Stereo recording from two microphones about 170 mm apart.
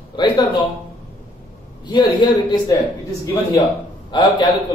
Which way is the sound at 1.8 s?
25° left (ahead or behind).